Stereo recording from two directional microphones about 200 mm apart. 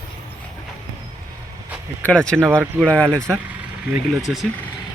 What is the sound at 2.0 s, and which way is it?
Speech, 5° left (ahead or behind).